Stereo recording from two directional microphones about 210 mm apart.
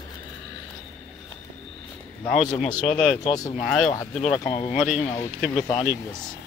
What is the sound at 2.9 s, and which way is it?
Speech, centre (ahead or behind).